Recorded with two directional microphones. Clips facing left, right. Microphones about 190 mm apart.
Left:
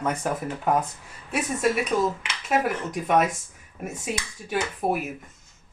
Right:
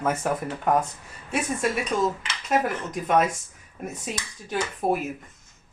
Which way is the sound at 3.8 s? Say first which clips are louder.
Left 2 dB; 5° left (ahead or behind).